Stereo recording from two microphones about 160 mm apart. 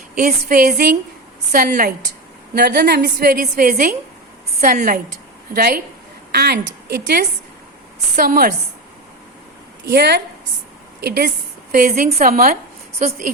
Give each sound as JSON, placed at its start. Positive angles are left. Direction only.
{"t": 0.2, "sound": "a woman's voice", "side_deg": -60}
{"t": 2.6, "sound": "a woman's voice", "side_deg": -75}
{"t": 5.5, "sound": "a woman's voice", "side_deg": -75}
{"t": 6.3, "sound": "a woman's voice", "side_deg": -85}
{"t": 8.1, "sound": "a woman's voice", "side_deg": -60}
{"t": 9.9, "sound": "a woman's voice", "side_deg": -90}
{"t": 11.7, "sound": "a woman's voice", "side_deg": -65}
{"t": 13.0, "sound": "speech", "side_deg": -50}